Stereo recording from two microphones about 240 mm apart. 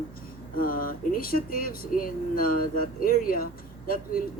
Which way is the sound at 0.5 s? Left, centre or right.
Left.